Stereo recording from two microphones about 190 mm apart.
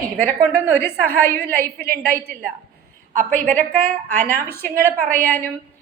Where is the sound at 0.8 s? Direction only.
10° left (ahead or behind).